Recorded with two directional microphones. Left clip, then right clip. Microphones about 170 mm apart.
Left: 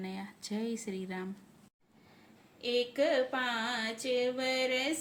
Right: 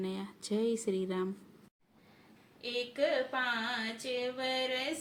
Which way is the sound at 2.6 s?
45° left (ahead or behind).